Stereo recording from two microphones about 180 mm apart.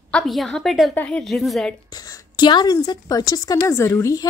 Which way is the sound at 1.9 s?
20° left (ahead or behind).